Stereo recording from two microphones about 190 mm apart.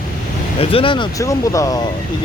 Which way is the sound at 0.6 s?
30° left (ahead or behind).